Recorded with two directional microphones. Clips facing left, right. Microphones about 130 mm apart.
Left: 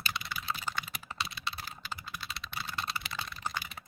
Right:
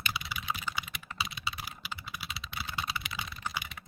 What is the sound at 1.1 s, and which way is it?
Computer keyboard, 5° right (ahead or behind).